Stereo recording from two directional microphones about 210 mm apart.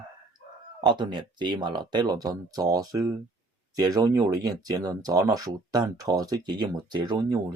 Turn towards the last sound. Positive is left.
turn(degrees=-20)  # may be behind; listen again after turning